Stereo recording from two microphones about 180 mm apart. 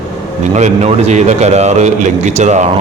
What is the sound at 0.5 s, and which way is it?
A man's voice, 40° right (ahead or behind).